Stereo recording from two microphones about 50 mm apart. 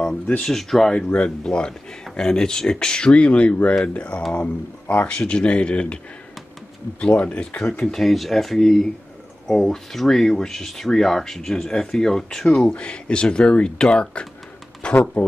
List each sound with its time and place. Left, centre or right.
0.4 s speech: centre; by 5.9 s left
7.0 s speech: left
7.8 s speech: centre; by 15.2 s left